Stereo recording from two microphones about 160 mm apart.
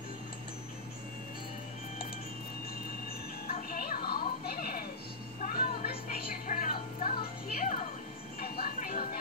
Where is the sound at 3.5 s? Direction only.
65° left (ahead or behind).